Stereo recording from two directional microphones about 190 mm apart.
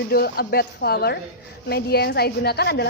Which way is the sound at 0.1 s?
50° left (ahead or behind).